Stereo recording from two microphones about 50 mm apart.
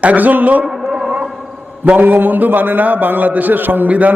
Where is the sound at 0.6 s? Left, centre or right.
Centre.